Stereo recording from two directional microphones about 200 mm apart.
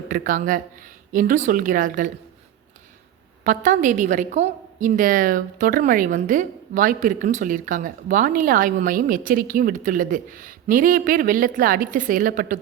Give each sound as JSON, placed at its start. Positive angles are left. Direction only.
{"t": 0.1, "sound": "a woman's voice", "side_deg": -45}
{"t": 3.4, "sound": "a woman's voice", "side_deg": -40}